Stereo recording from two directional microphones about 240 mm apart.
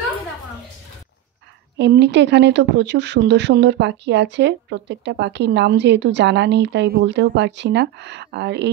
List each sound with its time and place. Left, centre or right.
1.8 s speech: right